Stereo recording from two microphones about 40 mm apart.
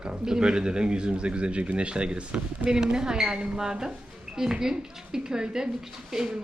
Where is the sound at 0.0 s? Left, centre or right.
Centre.